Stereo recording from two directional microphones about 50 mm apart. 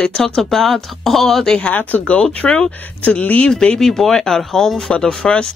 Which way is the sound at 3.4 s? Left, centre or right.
Centre.